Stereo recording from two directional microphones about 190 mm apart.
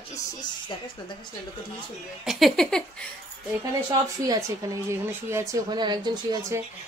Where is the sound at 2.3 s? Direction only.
Centre (ahead or behind).